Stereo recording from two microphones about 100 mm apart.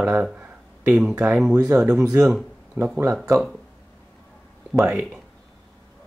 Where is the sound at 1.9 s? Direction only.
30° right (ahead or behind).